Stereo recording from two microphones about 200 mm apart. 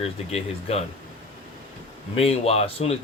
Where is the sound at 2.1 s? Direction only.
30° left (ahead or behind).